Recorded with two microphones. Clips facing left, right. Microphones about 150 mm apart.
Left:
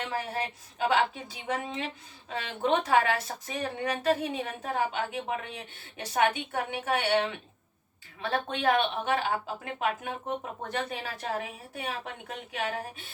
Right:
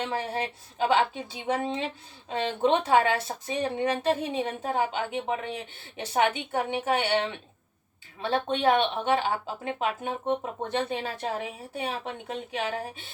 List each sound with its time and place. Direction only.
0.0 s a woman's voice: 30° right (ahead or behind)